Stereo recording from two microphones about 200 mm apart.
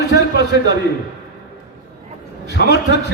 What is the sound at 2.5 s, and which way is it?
Speech, 55° left (ahead or behind).